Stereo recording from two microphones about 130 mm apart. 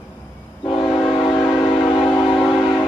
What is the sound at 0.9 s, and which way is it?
Train, 40° left (ahead or behind).